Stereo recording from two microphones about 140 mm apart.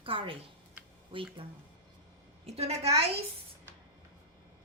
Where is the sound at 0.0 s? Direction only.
40° right (ahead or behind).